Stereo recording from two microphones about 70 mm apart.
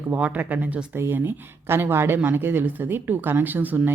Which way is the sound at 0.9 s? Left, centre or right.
Right.